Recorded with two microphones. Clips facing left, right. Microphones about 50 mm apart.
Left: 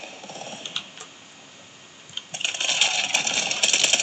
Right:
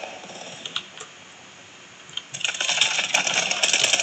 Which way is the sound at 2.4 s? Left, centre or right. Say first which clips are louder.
Even; right.